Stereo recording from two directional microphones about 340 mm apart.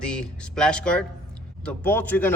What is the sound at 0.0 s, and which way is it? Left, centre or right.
A man's voice, centre.